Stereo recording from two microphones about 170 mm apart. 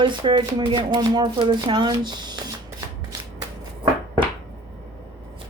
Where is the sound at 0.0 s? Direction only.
30° right (ahead or behind).